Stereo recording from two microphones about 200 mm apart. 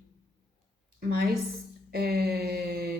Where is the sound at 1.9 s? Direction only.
50° right (ahead or behind).